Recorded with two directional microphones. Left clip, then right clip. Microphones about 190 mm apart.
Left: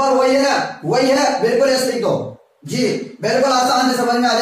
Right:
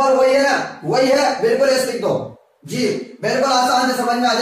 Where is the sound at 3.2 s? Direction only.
15° left (ahead or behind).